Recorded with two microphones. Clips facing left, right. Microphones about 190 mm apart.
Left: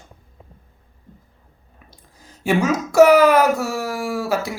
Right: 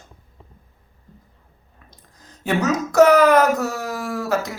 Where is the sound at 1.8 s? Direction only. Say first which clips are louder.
Left 1 dB; 10° left (ahead or behind).